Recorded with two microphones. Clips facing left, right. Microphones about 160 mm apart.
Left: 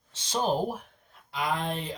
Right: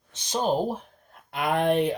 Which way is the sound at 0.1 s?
20° right (ahead or behind).